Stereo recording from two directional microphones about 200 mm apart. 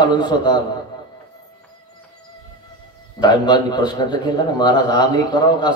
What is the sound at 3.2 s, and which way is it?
A man's voice, 20° left (ahead or behind).